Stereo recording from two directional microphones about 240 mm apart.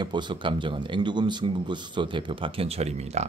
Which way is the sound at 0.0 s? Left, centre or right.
Centre.